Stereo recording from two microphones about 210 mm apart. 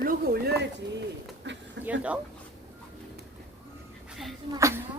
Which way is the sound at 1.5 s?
55° right (ahead or behind).